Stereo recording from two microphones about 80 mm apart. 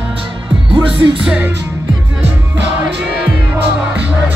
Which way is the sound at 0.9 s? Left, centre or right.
Right.